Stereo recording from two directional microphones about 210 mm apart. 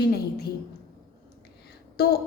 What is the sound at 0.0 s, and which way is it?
Speech, 50° left (ahead or behind).